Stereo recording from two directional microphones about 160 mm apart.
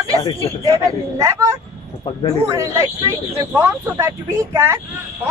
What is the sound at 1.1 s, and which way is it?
Speech, 20° right (ahead or behind).